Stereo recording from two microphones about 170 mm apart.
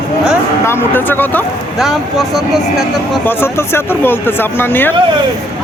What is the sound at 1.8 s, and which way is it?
Speech, centre (ahead or behind).